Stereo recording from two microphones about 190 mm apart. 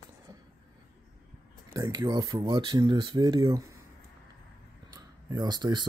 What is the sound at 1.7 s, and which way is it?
Speech, 20° right (ahead or behind).